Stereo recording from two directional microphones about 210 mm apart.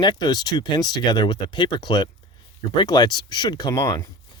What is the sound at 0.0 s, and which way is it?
Speech, 20° left (ahead or behind).